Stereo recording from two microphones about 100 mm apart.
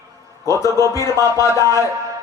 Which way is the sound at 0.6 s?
30° left (ahead or behind).